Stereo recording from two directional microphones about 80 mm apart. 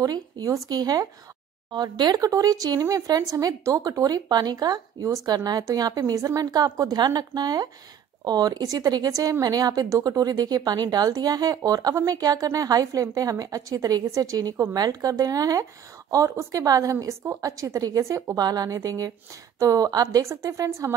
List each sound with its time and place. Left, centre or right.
0.0 s speech: right
1.7 s speech: right
2.1 s speech: right
16.3 s a woman's voice: right
18.4 s speech: right